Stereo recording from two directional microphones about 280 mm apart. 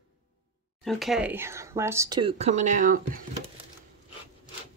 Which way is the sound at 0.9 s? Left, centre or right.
Centre.